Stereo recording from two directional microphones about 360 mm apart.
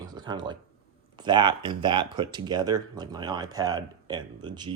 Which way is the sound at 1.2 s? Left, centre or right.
Centre.